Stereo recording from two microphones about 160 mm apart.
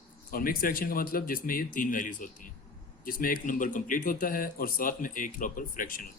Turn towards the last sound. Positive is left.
turn(degrees=60)  # may be behind; listen again after turning